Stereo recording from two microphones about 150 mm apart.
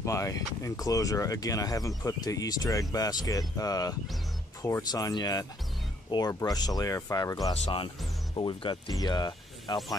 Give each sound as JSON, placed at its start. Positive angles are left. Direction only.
{"t": 0.0, "sound": "speech", "side_deg": 20}
{"t": 7.6, "sound": "speech", "side_deg": 35}